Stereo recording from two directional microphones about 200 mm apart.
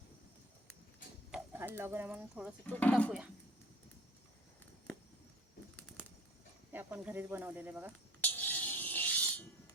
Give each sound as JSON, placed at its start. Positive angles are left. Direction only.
{"t": 1.3, "sound": "speech", "side_deg": -10}
{"t": 2.6, "sound": "speech", "side_deg": 5}
{"t": 6.7, "sound": "speech", "side_deg": -10}
{"t": 8.2, "sound": "a sound", "side_deg": 10}